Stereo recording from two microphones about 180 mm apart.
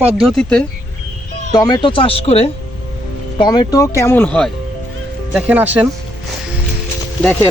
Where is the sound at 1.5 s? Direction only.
20° left (ahead or behind).